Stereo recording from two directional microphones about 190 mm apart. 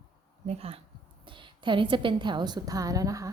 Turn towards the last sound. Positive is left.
turn(degrees=-15)  # may be behind; listen again after turning